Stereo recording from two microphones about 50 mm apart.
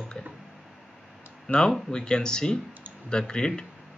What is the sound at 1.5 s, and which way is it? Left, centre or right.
Speech, left.